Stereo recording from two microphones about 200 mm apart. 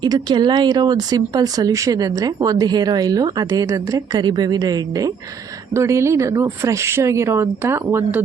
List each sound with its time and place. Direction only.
0.0 s speech: 20° right (ahead or behind)